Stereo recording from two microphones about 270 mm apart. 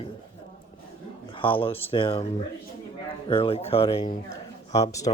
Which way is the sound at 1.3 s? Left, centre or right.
Centre.